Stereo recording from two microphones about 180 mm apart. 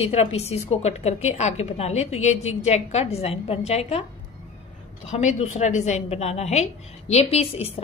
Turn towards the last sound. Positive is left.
turn(degrees=35)  # may be behind; listen again after turning